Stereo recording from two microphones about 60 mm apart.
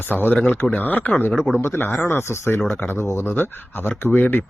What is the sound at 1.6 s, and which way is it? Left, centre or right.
Speech, left.